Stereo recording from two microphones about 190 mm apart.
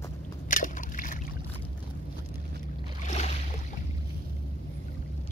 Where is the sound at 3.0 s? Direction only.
35° left (ahead or behind).